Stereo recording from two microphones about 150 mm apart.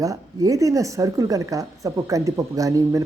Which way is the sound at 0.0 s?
20° right (ahead or behind).